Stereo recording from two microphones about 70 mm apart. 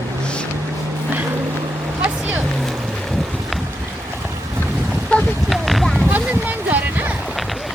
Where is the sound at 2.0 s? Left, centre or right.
Right.